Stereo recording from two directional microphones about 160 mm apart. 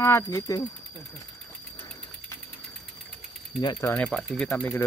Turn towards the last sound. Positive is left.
turn(degrees=15)  # may be behind; listen again after turning